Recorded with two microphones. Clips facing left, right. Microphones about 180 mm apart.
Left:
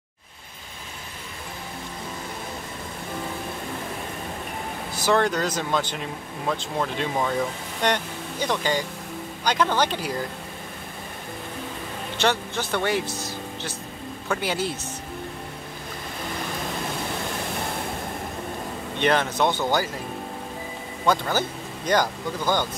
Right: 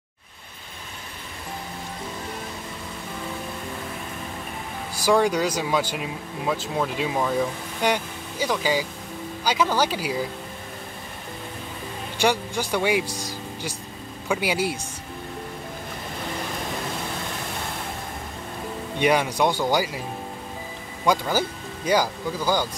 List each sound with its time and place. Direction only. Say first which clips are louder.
4.9 s speech: right 2 dB; 10° right (ahead or behind)
12.2 s speech: right 2 dB; 10° right (ahead or behind)
18.9 s speech: right 1 dB; 10° right (ahead or behind)
21.0 s speech: right 1 dB; 10° right (ahead or behind)